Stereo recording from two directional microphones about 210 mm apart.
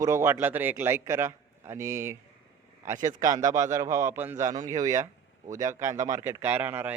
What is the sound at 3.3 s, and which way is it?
A man's voice, 15° right (ahead or behind).